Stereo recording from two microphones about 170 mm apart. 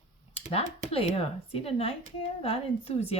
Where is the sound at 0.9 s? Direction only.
35° left (ahead or behind).